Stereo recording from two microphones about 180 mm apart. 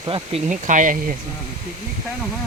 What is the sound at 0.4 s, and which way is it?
Speech, 45° right (ahead or behind).